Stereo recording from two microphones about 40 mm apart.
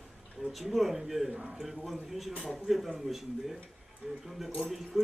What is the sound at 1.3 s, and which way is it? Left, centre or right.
Speech, centre.